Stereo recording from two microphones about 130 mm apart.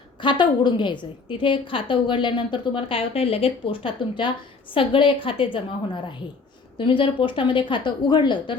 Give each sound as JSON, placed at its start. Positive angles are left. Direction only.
{"t": 0.2, "sound": "a woman's voice", "side_deg": 35}